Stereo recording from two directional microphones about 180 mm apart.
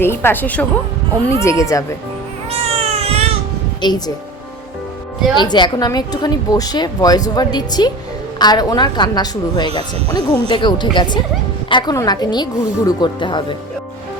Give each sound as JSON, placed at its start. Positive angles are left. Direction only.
{"t": 0.0, "sound": "speech", "side_deg": 10}
{"t": 2.5, "sound": "cat", "side_deg": -35}
{"t": 3.8, "sound": "a woman's voice", "side_deg": 25}
{"t": 5.4, "sound": "a woman's voice", "side_deg": 25}